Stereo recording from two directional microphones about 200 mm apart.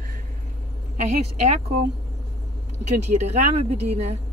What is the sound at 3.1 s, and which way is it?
Speech, 30° right (ahead or behind).